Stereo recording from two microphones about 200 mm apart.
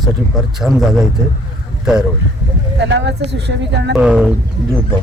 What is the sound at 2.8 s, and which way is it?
Speech, 60° right (ahead or behind).